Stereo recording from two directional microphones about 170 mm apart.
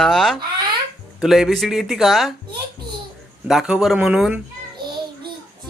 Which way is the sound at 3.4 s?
5° right (ahead or behind).